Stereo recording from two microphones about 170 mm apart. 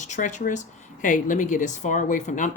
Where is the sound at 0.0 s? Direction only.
45° left (ahead or behind).